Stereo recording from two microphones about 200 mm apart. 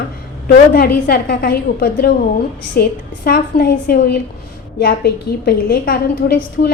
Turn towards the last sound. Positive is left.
turn(degrees=50)  # may be behind; listen again after turning